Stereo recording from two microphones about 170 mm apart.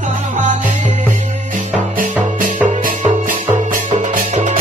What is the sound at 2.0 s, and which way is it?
Music, 50° right (ahead or behind).